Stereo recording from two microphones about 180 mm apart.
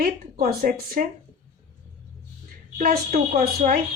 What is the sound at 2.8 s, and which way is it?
A woman's voice, 55° right (ahead or behind).